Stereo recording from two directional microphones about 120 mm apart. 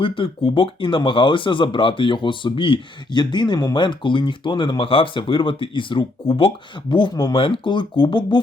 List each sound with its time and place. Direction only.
0.0 s speech: 50° left (ahead or behind)